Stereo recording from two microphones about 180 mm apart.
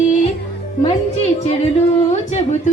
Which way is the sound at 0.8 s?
35° left (ahead or behind).